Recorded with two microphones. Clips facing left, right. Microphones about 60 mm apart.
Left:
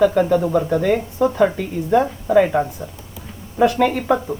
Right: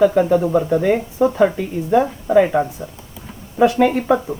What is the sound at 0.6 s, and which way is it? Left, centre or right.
Speech, centre.